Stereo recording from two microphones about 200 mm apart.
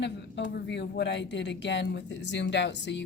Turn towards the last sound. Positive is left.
turn(degrees=60)  # may be behind; listen again after turning